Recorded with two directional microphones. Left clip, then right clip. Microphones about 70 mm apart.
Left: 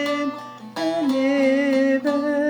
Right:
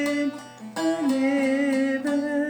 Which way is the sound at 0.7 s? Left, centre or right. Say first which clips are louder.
Left 2 dB; right.